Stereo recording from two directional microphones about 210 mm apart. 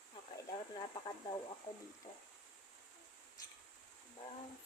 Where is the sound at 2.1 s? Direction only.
25° left (ahead or behind).